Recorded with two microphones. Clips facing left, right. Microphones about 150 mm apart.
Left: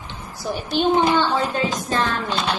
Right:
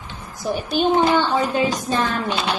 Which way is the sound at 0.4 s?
5° right (ahead or behind).